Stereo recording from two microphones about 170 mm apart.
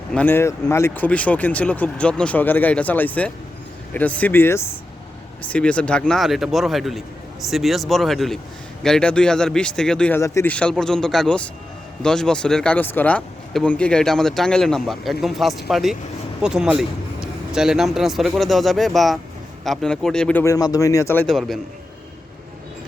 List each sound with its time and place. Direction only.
0.1 s speech: 10° left (ahead or behind)
20.4 s speech: 20° left (ahead or behind)
21.2 s speech: centre (ahead or behind)